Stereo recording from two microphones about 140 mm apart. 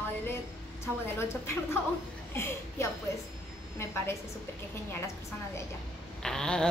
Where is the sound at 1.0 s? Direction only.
20° left (ahead or behind).